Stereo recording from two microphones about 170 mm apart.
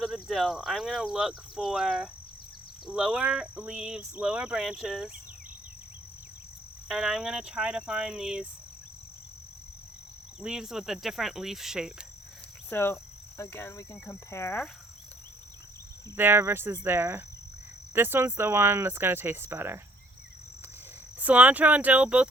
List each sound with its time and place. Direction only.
0.0 s speech: centre (ahead or behind)
6.8 s speech: centre (ahead or behind)
10.4 s speech: 5° right (ahead or behind)
12.7 s cricket: 15° left (ahead or behind)
16.1 s speech: 15° right (ahead or behind)
21.2 s speech: 10° right (ahead or behind)